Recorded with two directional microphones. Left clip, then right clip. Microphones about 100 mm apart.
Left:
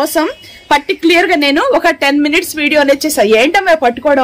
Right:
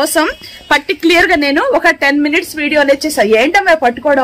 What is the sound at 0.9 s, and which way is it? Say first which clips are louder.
Speech: right 2 dB; 25° left (ahead or behind).